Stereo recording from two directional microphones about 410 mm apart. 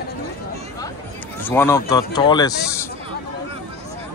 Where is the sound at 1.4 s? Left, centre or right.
Centre.